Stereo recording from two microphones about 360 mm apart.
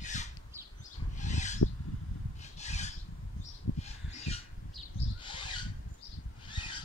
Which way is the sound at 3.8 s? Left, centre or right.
Centre.